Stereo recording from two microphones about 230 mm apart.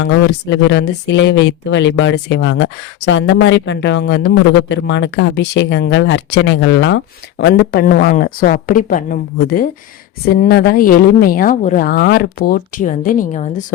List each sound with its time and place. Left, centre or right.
0.0 s speech: left